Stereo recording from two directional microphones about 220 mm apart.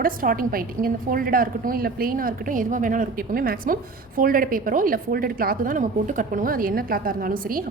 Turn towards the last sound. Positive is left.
turn(degrees=-40)  # may be behind; listen again after turning